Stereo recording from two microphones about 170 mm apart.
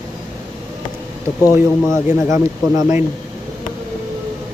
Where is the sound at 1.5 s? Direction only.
15° right (ahead or behind).